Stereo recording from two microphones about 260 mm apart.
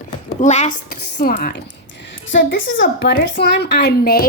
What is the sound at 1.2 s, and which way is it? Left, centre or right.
Speech, left.